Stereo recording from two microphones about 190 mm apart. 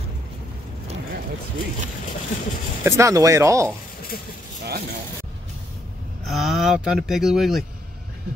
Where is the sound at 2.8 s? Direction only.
15° right (ahead or behind).